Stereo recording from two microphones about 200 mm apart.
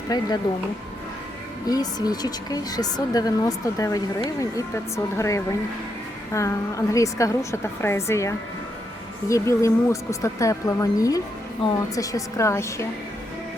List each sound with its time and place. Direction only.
0.1 s speech: 20° left (ahead or behind)
1.6 s a woman's voice: 20° left (ahead or behind)